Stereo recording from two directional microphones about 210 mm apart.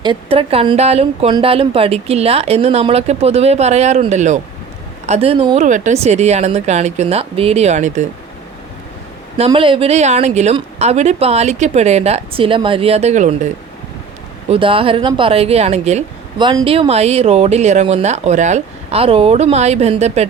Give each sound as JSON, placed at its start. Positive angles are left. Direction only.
{"t": 0.0, "sound": "speech", "side_deg": -25}
{"t": 9.4, "sound": "speech", "side_deg": -25}
{"t": 14.5, "sound": "speech", "side_deg": -25}